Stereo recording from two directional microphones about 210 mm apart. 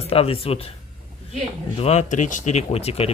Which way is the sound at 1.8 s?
30° left (ahead or behind).